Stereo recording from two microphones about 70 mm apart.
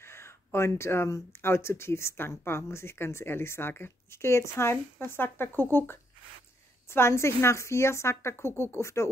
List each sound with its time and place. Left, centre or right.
0.0 s speech: left